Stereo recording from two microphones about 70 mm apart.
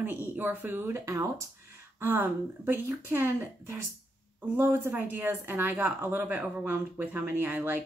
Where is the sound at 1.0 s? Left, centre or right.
Right.